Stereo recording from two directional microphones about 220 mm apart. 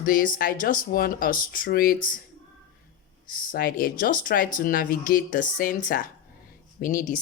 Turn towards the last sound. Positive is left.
turn(degrees=40)  # may be behind; listen again after turning